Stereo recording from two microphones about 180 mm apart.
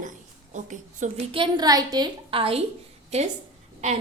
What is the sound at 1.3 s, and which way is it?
A woman's voice, 25° right (ahead or behind).